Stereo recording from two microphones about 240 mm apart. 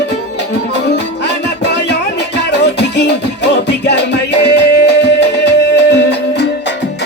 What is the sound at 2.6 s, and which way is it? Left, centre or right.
Music, left.